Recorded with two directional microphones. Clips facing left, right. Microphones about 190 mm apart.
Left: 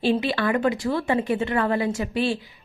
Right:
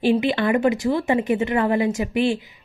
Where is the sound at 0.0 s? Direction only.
15° right (ahead or behind).